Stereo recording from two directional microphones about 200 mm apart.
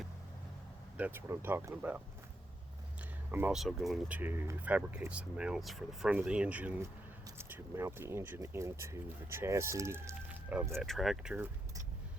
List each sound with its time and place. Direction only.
0.9 s speech: 10° right (ahead or behind)
3.3 s speech: 5° right (ahead or behind)